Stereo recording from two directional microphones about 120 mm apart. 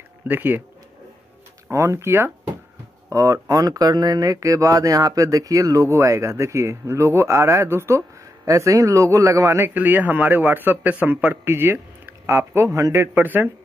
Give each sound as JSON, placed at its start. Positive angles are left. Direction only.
{"t": 0.3, "sound": "a man's voice", "side_deg": -15}
{"t": 1.7, "sound": "a man's voice", "side_deg": -25}